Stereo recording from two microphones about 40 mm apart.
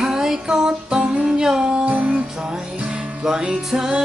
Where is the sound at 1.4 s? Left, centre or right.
Centre.